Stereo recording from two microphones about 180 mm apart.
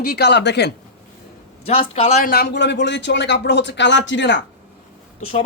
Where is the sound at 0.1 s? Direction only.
70° left (ahead or behind).